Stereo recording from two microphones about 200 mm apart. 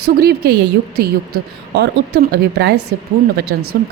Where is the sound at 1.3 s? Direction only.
90° right.